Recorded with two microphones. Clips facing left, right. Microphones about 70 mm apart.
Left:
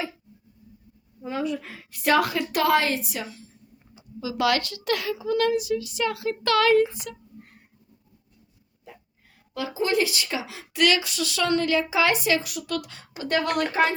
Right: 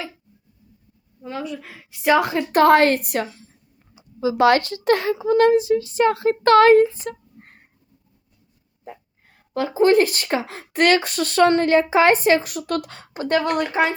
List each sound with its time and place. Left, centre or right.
1.2 s a woman's voice: centre
2.0 s a woman's voice: centre
2.4 s speech: right
4.2 s a woman's voice: right
9.6 s speech: right
13.5 s speech: centre